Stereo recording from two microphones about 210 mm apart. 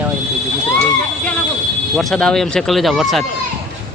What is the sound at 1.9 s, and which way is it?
Speech, centre (ahead or behind).